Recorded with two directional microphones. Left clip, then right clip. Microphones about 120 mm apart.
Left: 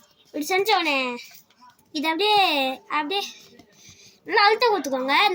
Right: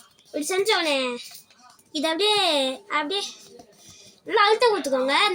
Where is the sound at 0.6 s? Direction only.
40° left (ahead or behind).